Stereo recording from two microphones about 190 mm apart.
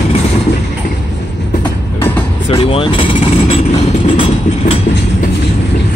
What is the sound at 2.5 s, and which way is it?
Speech, 30° left (ahead or behind).